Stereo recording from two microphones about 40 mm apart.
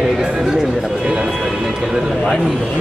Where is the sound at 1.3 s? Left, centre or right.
Centre.